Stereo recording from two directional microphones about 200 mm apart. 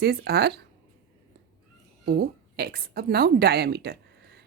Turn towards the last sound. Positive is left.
turn(degrees=-55)  # may be behind; listen again after turning